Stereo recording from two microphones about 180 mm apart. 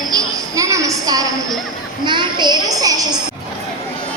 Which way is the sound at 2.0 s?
25° right (ahead or behind).